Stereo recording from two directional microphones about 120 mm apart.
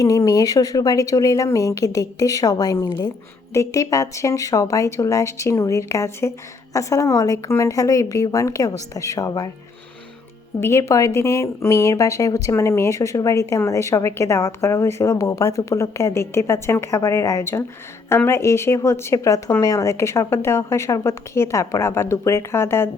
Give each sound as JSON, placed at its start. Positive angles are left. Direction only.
{"t": 0.0, "sound": "speech", "side_deg": 30}
{"t": 10.6, "sound": "speech", "side_deg": 25}